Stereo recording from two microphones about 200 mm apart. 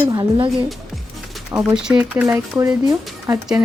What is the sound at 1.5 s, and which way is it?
Speech, 5° right (ahead or behind).